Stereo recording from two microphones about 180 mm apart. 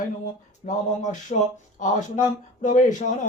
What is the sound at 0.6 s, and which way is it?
Speech, 45° left (ahead or behind).